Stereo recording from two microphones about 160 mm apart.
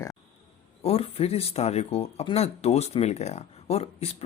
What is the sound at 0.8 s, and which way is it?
Speech, 40° left (ahead or behind).